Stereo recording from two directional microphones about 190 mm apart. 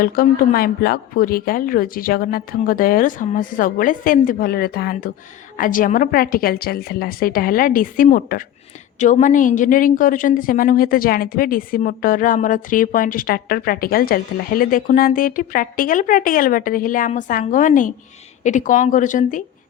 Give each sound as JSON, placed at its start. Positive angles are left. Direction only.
{"t": 0.0, "sound": "a woman's voice", "side_deg": 50}